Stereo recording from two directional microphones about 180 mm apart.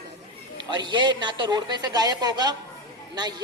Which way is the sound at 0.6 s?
25° right (ahead or behind).